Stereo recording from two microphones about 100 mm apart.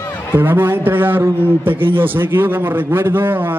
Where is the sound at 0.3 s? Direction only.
20° right (ahead or behind).